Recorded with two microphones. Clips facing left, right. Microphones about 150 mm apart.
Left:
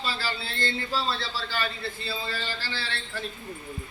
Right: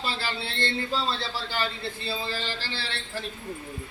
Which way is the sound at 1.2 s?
20° right (ahead or behind).